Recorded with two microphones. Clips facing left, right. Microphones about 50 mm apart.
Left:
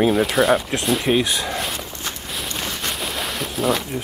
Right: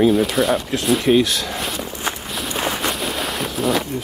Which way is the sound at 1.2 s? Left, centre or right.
Centre.